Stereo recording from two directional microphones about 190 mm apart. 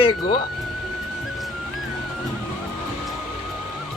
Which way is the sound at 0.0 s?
25° left (ahead or behind).